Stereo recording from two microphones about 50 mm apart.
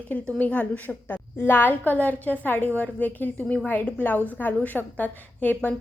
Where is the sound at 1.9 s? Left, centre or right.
Left.